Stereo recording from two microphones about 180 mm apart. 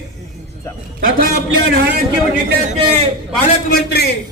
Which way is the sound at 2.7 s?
30° right (ahead or behind).